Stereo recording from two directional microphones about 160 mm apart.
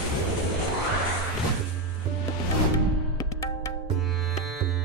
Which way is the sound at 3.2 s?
20° left (ahead or behind).